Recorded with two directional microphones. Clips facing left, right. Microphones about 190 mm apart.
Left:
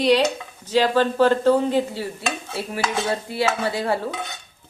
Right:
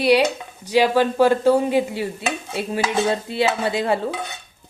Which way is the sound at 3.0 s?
20° right (ahead or behind).